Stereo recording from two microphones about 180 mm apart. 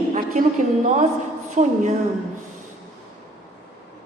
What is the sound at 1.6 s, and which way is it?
Speech, 40° right (ahead or behind).